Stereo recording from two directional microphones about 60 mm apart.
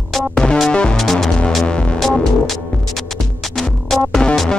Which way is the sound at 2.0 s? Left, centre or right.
Centre.